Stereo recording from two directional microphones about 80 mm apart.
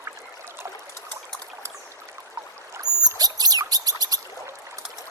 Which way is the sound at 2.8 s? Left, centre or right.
Right.